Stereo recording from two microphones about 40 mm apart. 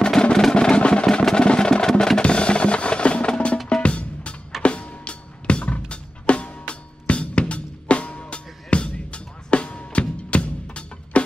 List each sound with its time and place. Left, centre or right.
0.0 s music: centre
2.2 s percussion: left
3.8 s music: left